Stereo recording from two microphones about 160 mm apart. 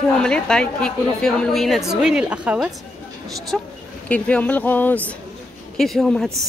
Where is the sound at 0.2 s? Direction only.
5° left (ahead or behind).